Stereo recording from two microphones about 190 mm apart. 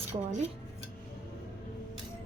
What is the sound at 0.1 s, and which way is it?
Speech, 40° right (ahead or behind).